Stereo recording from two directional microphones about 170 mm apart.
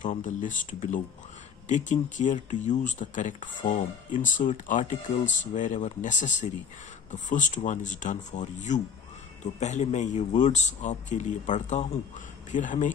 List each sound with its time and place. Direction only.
0.0 s speech: 50° left (ahead or behind)